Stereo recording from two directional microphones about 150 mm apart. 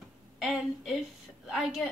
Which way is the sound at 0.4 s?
Centre (ahead or behind).